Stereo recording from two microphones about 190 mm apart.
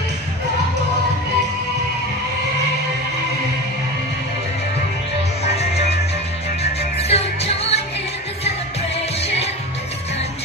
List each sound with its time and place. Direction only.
6.6 s music: 35° left (ahead or behind)